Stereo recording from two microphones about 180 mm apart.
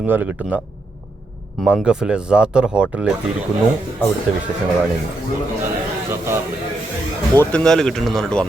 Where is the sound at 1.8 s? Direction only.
5° right (ahead or behind).